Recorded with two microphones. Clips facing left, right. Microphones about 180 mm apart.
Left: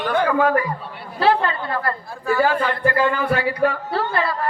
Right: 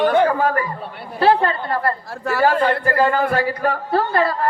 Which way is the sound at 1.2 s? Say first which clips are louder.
Right 2 dB; 45° right (ahead or behind).